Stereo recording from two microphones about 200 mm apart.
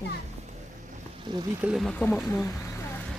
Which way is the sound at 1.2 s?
20° right (ahead or behind).